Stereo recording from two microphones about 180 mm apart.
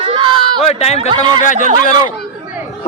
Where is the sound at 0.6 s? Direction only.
35° left (ahead or behind).